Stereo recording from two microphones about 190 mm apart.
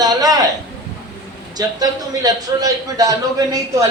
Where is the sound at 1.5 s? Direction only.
20° right (ahead or behind).